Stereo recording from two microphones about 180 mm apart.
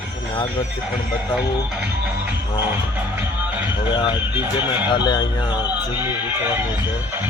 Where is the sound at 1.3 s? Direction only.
5° right (ahead or behind).